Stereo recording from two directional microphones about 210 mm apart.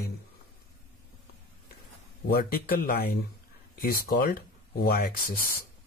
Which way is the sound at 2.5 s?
45° left (ahead or behind).